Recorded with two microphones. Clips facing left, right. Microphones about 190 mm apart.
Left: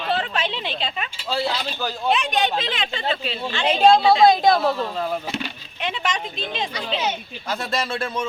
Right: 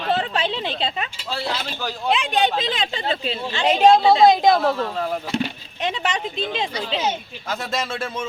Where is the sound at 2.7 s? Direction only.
35° right (ahead or behind).